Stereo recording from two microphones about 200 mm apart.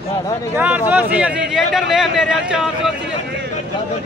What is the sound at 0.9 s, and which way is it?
Speech, 10° right (ahead or behind).